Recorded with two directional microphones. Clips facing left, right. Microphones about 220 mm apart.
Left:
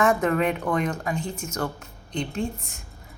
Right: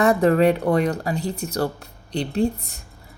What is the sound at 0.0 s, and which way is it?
Speech, 35° right (ahead or behind).